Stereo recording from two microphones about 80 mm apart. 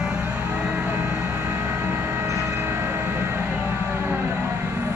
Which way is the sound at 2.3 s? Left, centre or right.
Right.